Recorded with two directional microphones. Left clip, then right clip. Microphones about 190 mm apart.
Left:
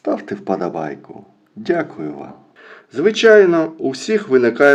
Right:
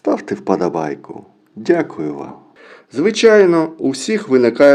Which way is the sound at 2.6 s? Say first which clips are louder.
Even; 45° right (ahead or behind).